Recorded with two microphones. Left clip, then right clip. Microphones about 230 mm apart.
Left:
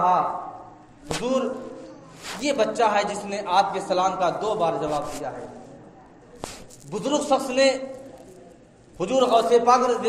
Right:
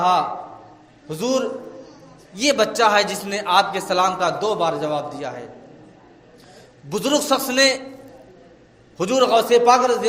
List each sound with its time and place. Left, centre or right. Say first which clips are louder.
1.2 s a man's voice: right 4 dB; right
6.9 s a man's voice: right 3 dB; right
9.0 s a man's voice: right 3 dB; right